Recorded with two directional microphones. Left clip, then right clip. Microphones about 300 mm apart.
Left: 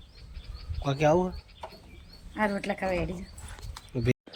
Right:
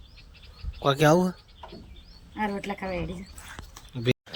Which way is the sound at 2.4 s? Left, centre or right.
Centre.